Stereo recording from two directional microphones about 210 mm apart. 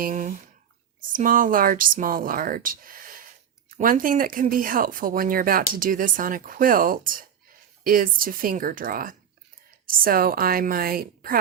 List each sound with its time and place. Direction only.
0.0 s a woman's voice: 40° right (ahead or behind)